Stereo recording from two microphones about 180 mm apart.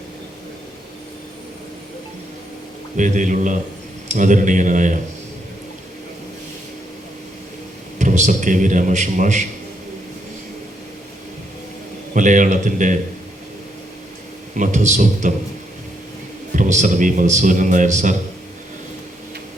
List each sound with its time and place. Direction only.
3.0 s a man's voice: 45° right (ahead or behind)
7.9 s a man's voice: 45° right (ahead or behind)
12.1 s a man's voice: 45° right (ahead or behind)
14.5 s a man's voice: 45° right (ahead or behind)
16.6 s a man's voice: 45° right (ahead or behind)